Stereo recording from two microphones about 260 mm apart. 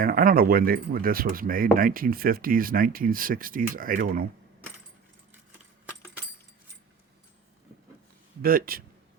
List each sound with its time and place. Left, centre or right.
0.0 s speech: right
8.4 s speech: right